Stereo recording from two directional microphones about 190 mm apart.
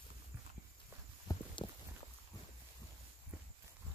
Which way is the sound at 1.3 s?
20° left (ahead or behind).